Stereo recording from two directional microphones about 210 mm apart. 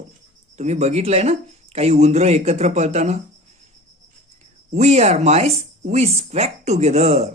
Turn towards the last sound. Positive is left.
turn(degrees=-30)  # may be behind; listen again after turning